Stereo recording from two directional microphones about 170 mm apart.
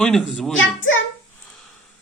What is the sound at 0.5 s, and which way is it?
Speech, 90° left.